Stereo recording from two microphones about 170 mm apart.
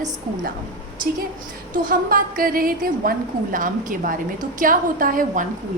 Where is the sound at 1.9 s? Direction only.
55° right (ahead or behind).